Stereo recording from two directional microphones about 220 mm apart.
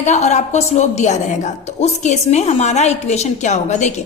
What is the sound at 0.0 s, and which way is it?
A woman's voice, 30° left (ahead or behind).